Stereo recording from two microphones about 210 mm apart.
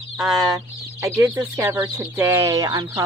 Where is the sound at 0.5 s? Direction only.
10° right (ahead or behind).